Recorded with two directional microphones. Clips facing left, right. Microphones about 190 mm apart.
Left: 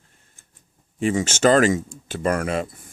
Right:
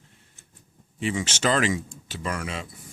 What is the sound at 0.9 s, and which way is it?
Speech, 45° left (ahead or behind).